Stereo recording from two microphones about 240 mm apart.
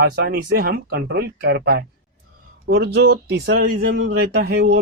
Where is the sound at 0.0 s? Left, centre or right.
Right.